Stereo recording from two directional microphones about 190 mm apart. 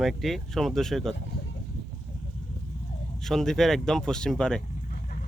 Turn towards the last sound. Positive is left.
turn(degrees=5)  # may be behind; listen again after turning